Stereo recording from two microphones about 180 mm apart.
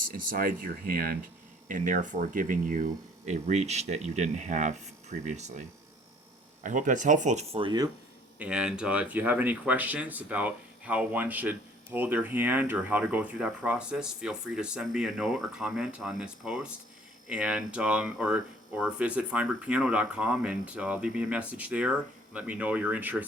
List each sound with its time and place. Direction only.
0.3 s speech: 55° right (ahead or behind); by 7.9 s 25° right (ahead or behind)
8.4 s speech: 5° right (ahead or behind)